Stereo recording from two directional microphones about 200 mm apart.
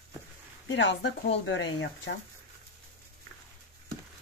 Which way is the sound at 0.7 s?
65° left (ahead or behind).